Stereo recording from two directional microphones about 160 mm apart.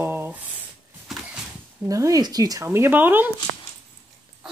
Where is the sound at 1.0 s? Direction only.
Centre (ahead or behind).